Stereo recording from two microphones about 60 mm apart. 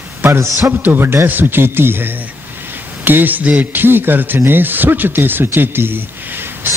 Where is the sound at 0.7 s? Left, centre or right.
Right.